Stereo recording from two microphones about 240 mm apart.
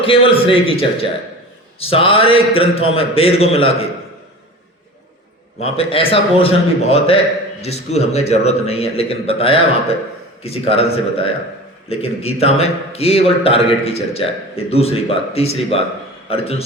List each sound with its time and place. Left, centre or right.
0.0 s a man's voice: left
5.5 s a man's voice: left